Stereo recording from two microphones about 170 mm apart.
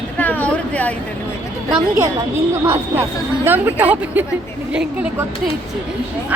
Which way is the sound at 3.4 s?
10° right (ahead or behind).